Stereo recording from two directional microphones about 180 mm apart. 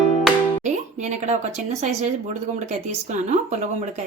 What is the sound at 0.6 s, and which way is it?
A woman's voice, 40° right (ahead or behind).